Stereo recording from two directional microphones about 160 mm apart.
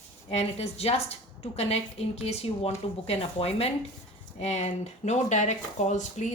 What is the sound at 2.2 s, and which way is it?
A woman's voice, 40° left (ahead or behind).